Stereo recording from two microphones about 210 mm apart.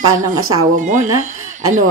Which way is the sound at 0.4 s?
90° right.